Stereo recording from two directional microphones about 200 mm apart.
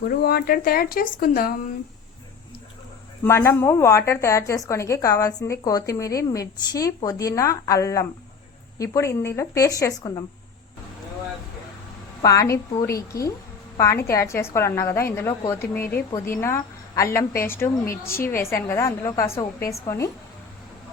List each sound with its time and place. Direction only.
0.1 s speech: 50° left (ahead or behind)
3.2 s a woman's voice: 15° left (ahead or behind)
12.2 s a woman's voice: 15° left (ahead or behind)